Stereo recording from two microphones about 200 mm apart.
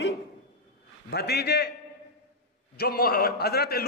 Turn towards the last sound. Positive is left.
turn(degrees=50)  # may be behind; listen again after turning